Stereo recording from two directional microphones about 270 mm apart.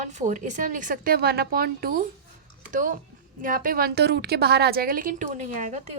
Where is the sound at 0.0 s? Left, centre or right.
Right.